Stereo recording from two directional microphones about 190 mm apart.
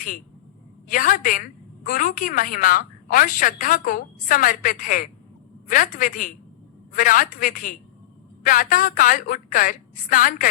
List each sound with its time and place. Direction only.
0.9 s a woman's voice: 45° left (ahead or behind)